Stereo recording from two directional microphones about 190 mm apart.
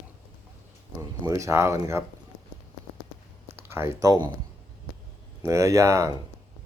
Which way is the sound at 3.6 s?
15° right (ahead or behind).